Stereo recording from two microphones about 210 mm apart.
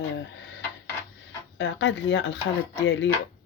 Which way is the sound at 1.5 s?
60° left (ahead or behind).